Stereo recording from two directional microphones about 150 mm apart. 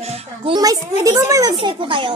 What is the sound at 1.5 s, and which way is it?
Music, 35° right (ahead or behind).